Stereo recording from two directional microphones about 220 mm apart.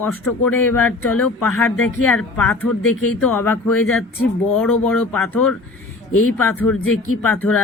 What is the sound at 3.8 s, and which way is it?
Speech, 70° left (ahead or behind).